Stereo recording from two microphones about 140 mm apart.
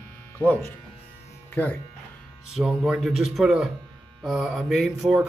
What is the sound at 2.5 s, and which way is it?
Speech, 5° right (ahead or behind).